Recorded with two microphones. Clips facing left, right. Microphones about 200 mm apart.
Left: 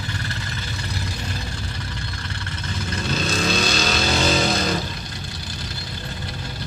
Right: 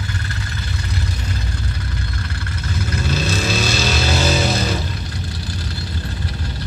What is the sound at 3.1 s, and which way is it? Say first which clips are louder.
Vehicle: even; 5° right (ahead or behind).